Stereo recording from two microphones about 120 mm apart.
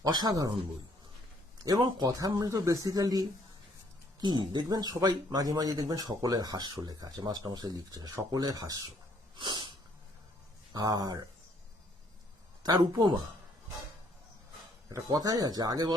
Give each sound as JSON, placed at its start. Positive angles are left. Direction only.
{"t": 0.0, "sound": "speech", "side_deg": -35}
{"t": 1.6, "sound": "speech", "side_deg": -35}
{"t": 9.3, "sound": "sneeze", "side_deg": -40}
{"t": 10.7, "sound": "speech", "side_deg": -35}
{"t": 12.6, "sound": "speech", "side_deg": -35}
{"t": 14.8, "sound": "speech", "side_deg": -30}